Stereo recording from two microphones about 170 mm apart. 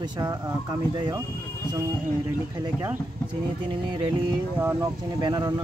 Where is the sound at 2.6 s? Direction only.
20° right (ahead or behind).